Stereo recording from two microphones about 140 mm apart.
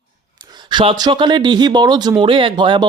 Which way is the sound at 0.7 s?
35° right (ahead or behind).